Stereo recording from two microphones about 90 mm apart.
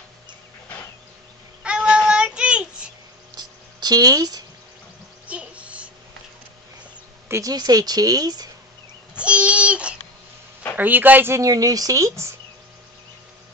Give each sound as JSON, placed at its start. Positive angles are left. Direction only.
{"t": 1.6, "sound": "child singing", "side_deg": -10}
{"t": 3.3, "sound": "a sound", "side_deg": -45}
{"t": 5.2, "sound": "a sound", "side_deg": -15}
{"t": 7.2, "sound": "a woman's voice", "side_deg": -30}
{"t": 7.5, "sound": "speech", "side_deg": -50}
{"t": 9.1, "sound": "babbling", "side_deg": -15}
{"t": 10.8, "sound": "speech", "side_deg": -20}
{"t": 11.4, "sound": "speech", "side_deg": -40}